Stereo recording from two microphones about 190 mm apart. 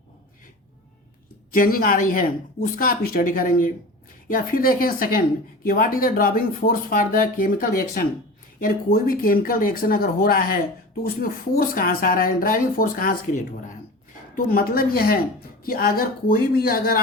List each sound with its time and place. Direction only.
1.5 s speech: 50° left (ahead or behind)